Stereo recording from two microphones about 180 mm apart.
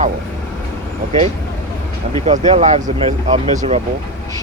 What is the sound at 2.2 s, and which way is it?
Speech, 40° right (ahead or behind).